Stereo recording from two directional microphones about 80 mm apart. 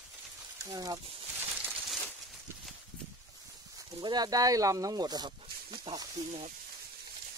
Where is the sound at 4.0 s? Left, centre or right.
Right.